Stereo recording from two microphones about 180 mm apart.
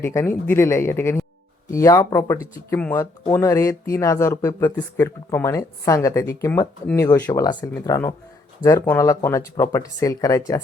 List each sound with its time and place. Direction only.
0.0 s speech: 15° left (ahead or behind)